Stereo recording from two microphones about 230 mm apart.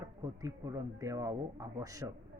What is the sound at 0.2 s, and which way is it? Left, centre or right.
Speech, centre.